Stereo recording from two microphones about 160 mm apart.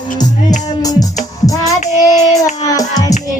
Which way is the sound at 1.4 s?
20° left (ahead or behind).